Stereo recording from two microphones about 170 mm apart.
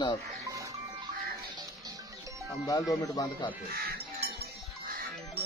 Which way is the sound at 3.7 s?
65° right (ahead or behind).